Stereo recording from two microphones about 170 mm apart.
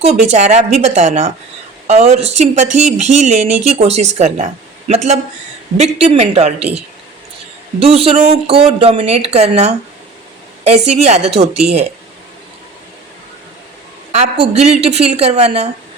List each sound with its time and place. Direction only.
0.0 s speech: 40° right (ahead or behind)
7.8 s speech: 35° right (ahead or behind)
14.5 s speech: 40° right (ahead or behind)